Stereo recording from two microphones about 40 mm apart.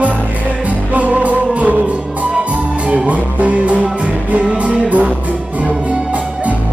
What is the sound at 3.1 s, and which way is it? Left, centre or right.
Music, right.